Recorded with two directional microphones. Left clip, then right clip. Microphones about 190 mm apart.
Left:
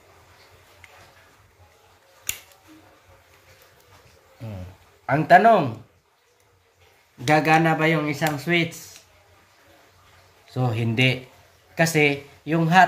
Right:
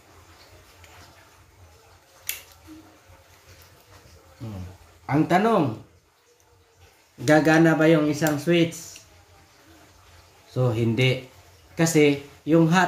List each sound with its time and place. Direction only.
5.0 s speech: 55° left (ahead or behind)
7.2 s speech: 50° left (ahead or behind)
10.5 s speech: 55° left (ahead or behind)